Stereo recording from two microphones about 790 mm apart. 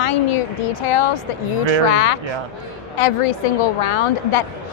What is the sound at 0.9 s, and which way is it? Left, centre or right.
A woman's voice, left.